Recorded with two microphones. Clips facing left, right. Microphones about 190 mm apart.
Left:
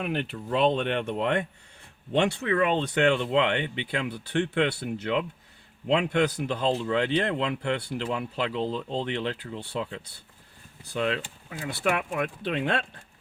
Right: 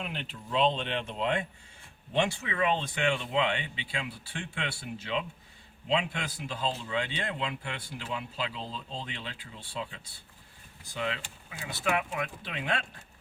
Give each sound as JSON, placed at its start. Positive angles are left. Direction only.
{"t": 0.0, "sound": "speech", "side_deg": 55}
{"t": 11.6, "sound": "speech", "side_deg": 60}